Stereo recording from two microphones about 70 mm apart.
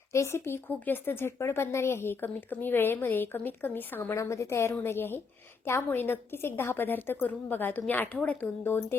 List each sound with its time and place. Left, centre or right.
0.1 s speech: left
4.1 s a woman's voice: left